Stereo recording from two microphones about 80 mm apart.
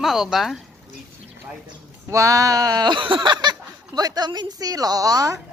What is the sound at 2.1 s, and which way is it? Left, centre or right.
Speech, right.